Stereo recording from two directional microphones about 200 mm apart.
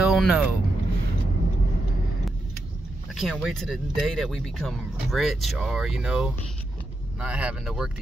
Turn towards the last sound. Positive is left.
turn(degrees=-5)  # may be behind; listen again after turning